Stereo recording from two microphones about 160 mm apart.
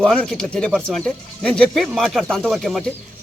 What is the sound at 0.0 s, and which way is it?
Speech, 5° left (ahead or behind).